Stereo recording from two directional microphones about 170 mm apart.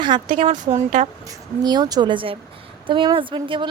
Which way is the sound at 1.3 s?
25° right (ahead or behind).